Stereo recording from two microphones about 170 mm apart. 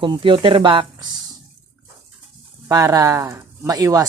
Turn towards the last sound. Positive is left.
turn(degrees=-20)  # may be behind; listen again after turning